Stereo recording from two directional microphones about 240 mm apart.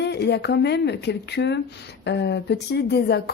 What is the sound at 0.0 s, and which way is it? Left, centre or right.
Speech, left.